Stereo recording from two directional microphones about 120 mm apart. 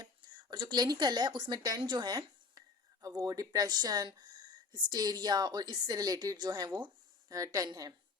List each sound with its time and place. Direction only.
0.0 s a woman's voice: 35° right (ahead or behind)